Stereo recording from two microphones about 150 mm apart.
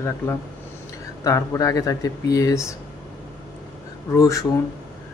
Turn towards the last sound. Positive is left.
turn(degrees=20)  # may be behind; listen again after turning